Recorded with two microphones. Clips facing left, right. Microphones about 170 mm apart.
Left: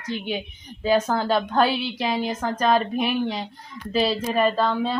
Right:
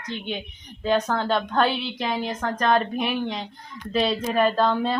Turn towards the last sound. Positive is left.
turn(degrees=0)  # may be behind; listen again after turning